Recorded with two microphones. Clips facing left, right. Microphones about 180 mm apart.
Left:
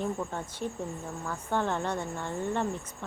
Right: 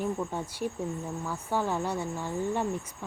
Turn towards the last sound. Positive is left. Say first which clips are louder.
# right 1 dB
turn(degrees=-10)  # may be behind; listen again after turning